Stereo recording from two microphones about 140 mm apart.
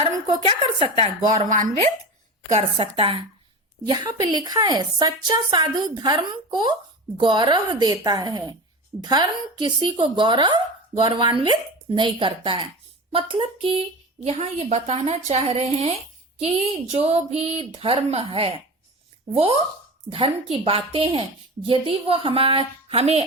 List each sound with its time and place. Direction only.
0.4 s a woman's voice: 40° right (ahead or behind)
1.5 s speech: 65° right (ahead or behind)
2.6 s a woman's voice: 40° right (ahead or behind)
20.1 s a woman's voice: 40° right (ahead or behind)